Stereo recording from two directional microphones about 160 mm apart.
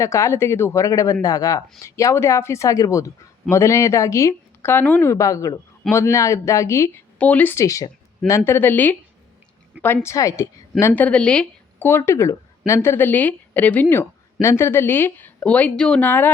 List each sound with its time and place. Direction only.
0.0 s a woman's voice: 20° left (ahead or behind)